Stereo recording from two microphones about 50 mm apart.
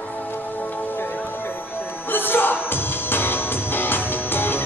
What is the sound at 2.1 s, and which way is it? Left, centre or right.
Music, left.